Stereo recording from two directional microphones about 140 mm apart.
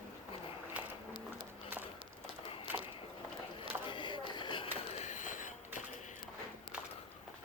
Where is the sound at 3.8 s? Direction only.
35° left (ahead or behind); by 5.5 s 65° left (ahead or behind).